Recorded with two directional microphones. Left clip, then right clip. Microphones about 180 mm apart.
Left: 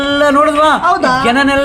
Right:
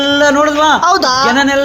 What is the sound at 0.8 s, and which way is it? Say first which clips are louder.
Speech: right 1 dB; 55° right (ahead or behind).